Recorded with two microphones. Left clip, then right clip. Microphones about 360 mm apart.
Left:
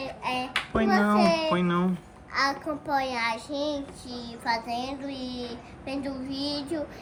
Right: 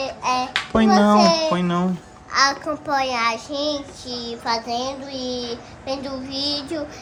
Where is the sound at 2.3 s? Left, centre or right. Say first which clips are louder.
Right 8 dB; centre.